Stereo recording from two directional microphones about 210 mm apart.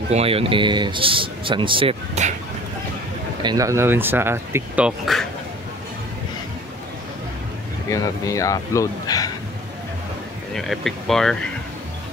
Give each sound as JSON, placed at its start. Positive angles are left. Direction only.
{"t": 0.1, "sound": "speech", "side_deg": -30}
{"t": 3.4, "sound": "speech", "side_deg": -15}
{"t": 7.9, "sound": "speech", "side_deg": 15}
{"t": 10.5, "sound": "speech", "side_deg": 0}